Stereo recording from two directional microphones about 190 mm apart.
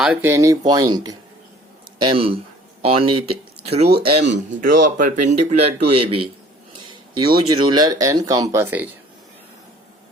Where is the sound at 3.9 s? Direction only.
60° right (ahead or behind).